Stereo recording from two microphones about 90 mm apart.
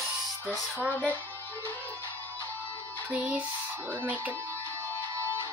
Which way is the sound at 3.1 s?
15° right (ahead or behind).